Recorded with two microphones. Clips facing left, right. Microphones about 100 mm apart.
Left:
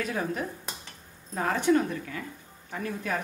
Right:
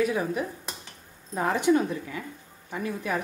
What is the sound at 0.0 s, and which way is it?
Speech, 10° right (ahead or behind).